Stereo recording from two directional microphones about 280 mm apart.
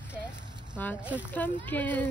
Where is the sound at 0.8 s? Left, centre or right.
Centre.